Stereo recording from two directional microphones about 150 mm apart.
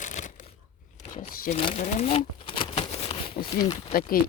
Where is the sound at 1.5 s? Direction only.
45° left (ahead or behind).